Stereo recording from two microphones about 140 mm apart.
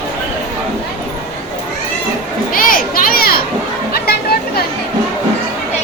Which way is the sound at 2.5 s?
85° left.